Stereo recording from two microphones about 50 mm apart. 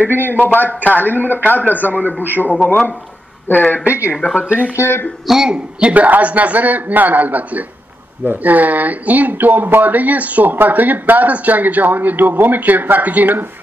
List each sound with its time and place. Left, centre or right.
0.1 s speech: right
0.4 s a man's voice: left
1.2 s speech: right
1.7 s a man's voice: left
2.2 s speech: right
2.5 s a man's voice: left
3.8 s speech: right
4.7 s speech: left
5.2 s speech: centre
5.5 s speech: right
6.0 s speech: right